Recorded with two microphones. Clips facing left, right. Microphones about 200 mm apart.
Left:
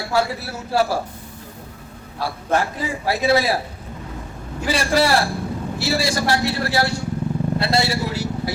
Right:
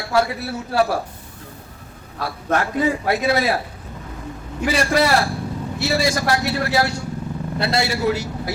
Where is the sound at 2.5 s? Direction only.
30° left (ahead or behind).